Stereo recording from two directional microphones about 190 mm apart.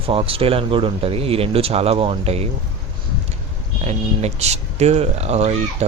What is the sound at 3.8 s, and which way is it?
Speech, 35° right (ahead or behind).